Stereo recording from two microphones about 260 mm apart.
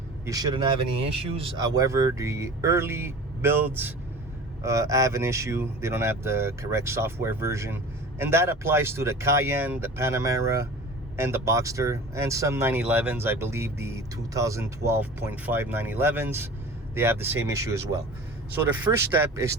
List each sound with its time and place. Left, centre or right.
0.3 s speech: centre